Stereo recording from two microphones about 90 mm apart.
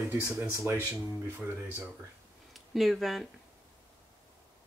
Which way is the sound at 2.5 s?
Centre (ahead or behind).